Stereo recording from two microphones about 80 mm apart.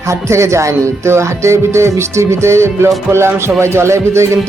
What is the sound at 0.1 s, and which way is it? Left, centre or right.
Speech, right.